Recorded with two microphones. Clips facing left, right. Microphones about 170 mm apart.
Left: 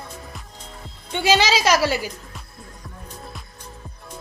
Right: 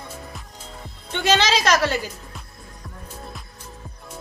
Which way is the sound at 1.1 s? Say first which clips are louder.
Left 1 dB; 10° left (ahead or behind).